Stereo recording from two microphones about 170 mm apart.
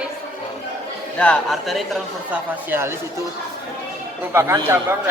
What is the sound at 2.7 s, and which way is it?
Speech, 15° right (ahead or behind).